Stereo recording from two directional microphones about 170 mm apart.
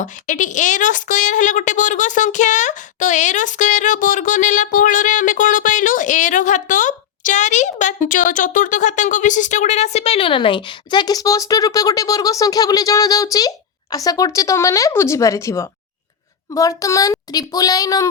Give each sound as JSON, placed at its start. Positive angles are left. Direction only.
{"t": 0.0, "sound": "a woman's voice", "side_deg": 50}